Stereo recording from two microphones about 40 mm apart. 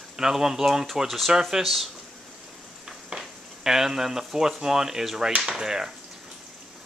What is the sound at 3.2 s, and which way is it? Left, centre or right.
Speech, centre.